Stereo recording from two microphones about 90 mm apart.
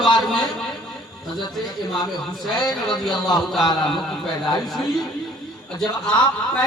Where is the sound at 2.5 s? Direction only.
50° left (ahead or behind).